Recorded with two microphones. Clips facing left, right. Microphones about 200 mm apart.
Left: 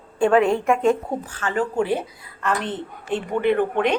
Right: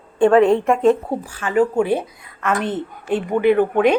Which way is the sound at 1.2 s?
10° right (ahead or behind).